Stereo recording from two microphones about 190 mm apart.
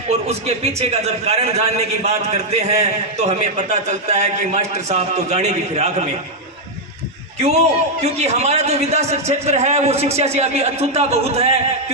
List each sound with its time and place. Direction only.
0.1 s a man's voice: 35° right (ahead or behind)
7.3 s a man's voice: 35° right (ahead or behind)